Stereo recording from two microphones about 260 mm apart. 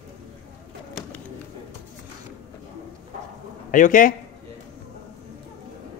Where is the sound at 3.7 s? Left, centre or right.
Left.